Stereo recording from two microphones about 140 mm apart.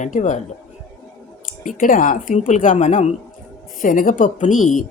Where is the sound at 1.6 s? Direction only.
70° left (ahead or behind).